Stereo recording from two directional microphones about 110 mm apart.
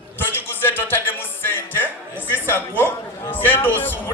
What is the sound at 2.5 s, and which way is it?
A man's voice, 20° left (ahead or behind).